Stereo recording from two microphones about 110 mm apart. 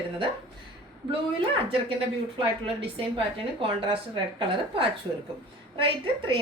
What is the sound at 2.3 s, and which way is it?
A woman's voice, 55° right (ahead or behind).